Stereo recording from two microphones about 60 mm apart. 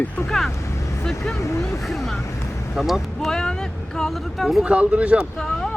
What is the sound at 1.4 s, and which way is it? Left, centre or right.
Speech, left.